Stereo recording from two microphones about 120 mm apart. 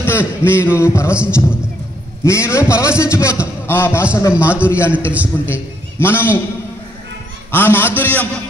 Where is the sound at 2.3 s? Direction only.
20° left (ahead or behind).